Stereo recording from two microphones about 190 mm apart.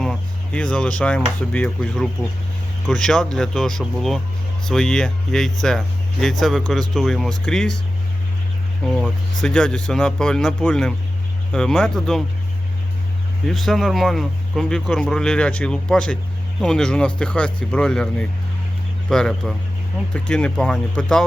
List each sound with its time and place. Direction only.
0.0 s a sound: 5° left (ahead or behind)
1.4 s speech: 5° left (ahead or behind)
8.9 s speech: 5° left (ahead or behind)
13.5 s speech: centre (ahead or behind)